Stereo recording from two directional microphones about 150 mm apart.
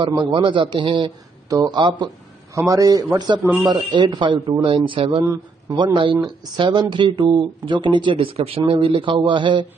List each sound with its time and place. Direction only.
0.0 s a man's voice: 30° right (ahead or behind)
5.2 s speech: 25° right (ahead or behind)